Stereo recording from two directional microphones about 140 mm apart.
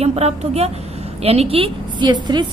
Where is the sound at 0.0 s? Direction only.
50° right (ahead or behind).